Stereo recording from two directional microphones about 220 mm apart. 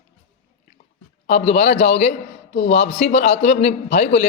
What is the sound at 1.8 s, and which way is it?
Speech, 50° left (ahead or behind).